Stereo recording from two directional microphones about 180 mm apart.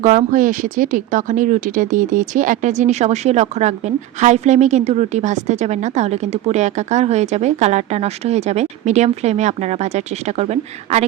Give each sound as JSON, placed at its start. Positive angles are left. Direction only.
{"t": 0.0, "sound": "speech", "side_deg": -40}